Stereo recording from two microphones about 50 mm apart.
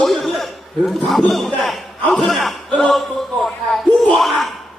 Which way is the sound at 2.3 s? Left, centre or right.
Centre.